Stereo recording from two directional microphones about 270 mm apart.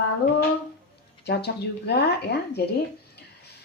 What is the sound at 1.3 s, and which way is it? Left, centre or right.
Speech, left.